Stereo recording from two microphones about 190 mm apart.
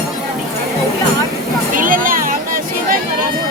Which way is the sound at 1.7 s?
45° right (ahead or behind).